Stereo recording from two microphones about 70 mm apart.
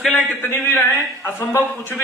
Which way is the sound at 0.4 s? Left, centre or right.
Left.